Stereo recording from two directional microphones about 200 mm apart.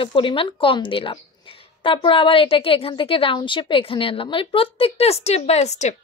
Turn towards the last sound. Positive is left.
turn(degrees=35)  # may be behind; listen again after turning